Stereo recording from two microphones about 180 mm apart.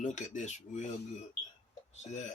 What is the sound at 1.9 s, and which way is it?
Speech, 40° left (ahead or behind).